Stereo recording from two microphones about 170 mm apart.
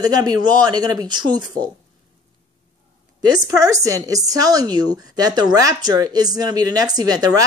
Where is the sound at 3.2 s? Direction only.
20° right (ahead or behind).